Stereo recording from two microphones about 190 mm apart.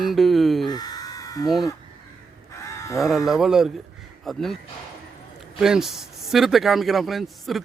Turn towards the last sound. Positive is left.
turn(degrees=0)  # may be behind; listen again after turning